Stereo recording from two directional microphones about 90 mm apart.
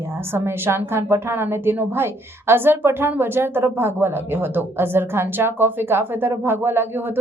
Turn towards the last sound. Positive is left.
turn(degrees=-25)  # may be behind; listen again after turning